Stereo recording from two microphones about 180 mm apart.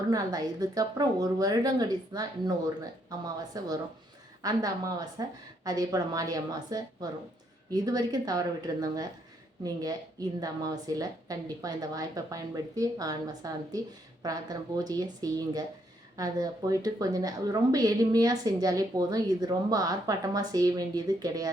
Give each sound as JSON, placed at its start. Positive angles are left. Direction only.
{"t": 0.1, "sound": "a woman's voice", "side_deg": -20}
{"t": 10.4, "sound": "a woman's voice", "side_deg": -20}